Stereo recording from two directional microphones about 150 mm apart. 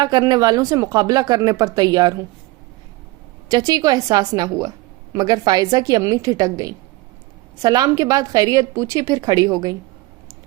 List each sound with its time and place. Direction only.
0.0 s a woman's voice: 25° right (ahead or behind)
3.5 s a woman's voice: 25° right (ahead or behind)